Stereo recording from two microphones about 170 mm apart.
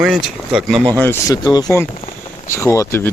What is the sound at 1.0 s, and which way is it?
Speech, 15° left (ahead or behind).